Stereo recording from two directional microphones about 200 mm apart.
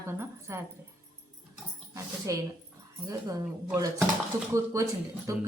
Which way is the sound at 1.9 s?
15° right (ahead or behind).